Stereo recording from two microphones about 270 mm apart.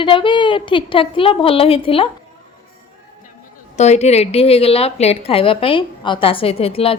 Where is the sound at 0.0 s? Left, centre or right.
Centre.